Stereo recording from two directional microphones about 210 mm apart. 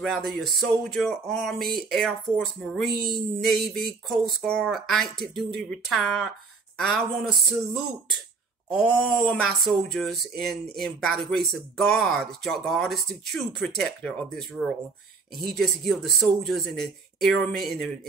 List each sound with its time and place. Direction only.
0.0 s speech: centre (ahead or behind)
2.9 s a sound: 45° right (ahead or behind)
3.4 s speech: centre (ahead or behind)